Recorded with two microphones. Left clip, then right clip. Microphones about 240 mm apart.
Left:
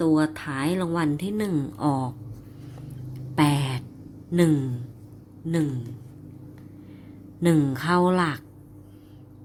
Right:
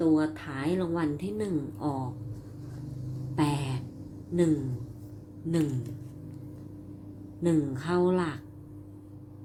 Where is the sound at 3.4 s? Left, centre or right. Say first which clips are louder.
Left 7 dB; left.